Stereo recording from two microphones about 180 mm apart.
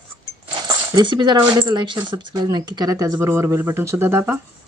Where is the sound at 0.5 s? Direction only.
25° right (ahead or behind).